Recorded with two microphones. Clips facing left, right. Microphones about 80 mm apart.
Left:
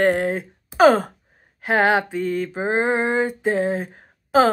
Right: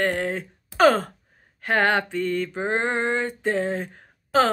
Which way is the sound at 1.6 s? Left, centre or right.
Centre.